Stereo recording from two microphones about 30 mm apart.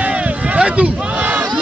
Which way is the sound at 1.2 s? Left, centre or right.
Right.